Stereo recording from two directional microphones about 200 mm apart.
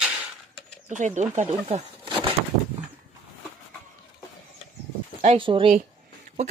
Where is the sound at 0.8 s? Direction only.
35° right (ahead or behind).